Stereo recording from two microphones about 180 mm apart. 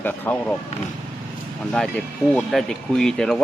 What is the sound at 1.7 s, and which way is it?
Speech, 5° left (ahead or behind).